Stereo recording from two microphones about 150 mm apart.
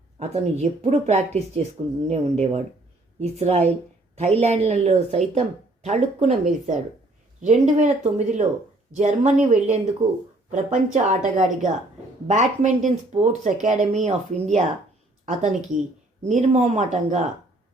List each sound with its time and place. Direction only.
0.2 s a woman's voice: 50° right (ahead or behind)